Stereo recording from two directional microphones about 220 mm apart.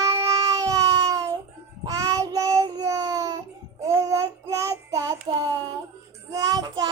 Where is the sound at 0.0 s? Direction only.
15° right (ahead or behind).